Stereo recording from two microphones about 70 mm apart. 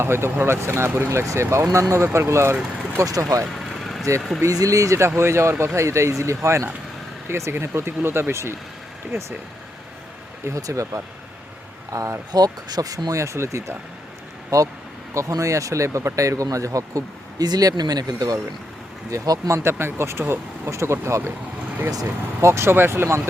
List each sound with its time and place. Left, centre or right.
0.0 s speech: right
3.0 s speech: right
3.5 s vehicle: centre
4.4 s speech: right
10.4 s speech: right
12.3 s speech: right
14.5 s speech: right
19.5 s speech: right
22.4 s speech: right